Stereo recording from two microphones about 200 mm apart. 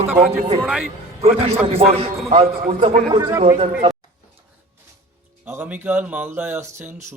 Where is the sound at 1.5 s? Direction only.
30° right (ahead or behind).